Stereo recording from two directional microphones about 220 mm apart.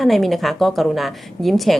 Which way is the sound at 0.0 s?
Centre (ahead or behind).